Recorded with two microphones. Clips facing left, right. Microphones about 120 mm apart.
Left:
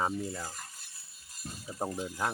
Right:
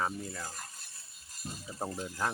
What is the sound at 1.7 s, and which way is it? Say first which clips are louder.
Speech: left 3 dB; 15° left (ahead or behind).